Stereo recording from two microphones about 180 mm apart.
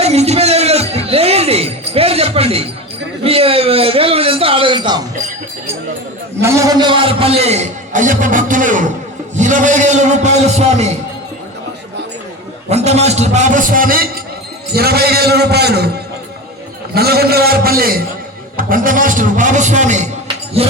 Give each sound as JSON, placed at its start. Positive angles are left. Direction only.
{"t": 0.0, "sound": "a sound", "side_deg": -35}
{"t": 6.4, "sound": "a man's voice", "side_deg": -20}
{"t": 12.7, "sound": "a man's voice", "side_deg": -35}
{"t": 16.9, "sound": "a man's voice", "side_deg": -60}
{"t": 20.2, "sound": "music", "side_deg": -35}